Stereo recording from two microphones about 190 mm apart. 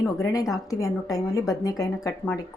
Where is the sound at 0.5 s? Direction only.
15° left (ahead or behind).